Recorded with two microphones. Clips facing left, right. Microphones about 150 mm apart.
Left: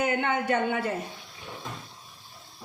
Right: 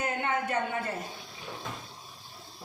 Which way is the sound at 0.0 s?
85° left.